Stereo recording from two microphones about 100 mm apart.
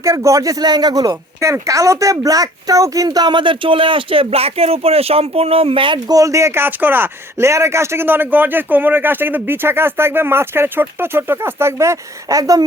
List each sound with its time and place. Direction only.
0.0 s speech: 30° right (ahead or behind); by 6.0 s 60° right (ahead or behind)
6.1 s speech: 35° right (ahead or behind)